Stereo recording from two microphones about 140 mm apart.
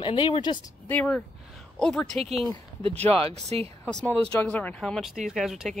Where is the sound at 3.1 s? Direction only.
45° right (ahead or behind).